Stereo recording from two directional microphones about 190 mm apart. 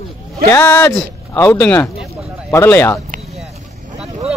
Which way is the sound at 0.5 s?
10° left (ahead or behind).